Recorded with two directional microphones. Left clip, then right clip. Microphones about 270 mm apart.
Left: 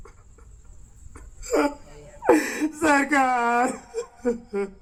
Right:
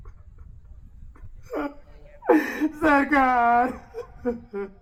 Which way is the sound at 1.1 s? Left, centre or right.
Left.